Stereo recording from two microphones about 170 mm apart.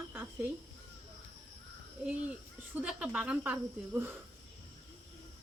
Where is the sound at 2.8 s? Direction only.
5° right (ahead or behind).